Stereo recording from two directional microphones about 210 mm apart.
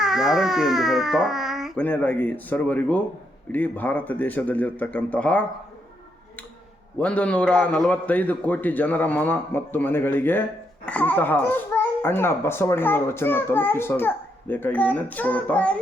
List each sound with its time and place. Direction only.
0.0 s a child's voice: centre (ahead or behind)
7.0 s a child's voice: 5° left (ahead or behind)